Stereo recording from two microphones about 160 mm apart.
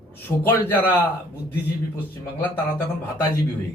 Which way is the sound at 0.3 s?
15° left (ahead or behind).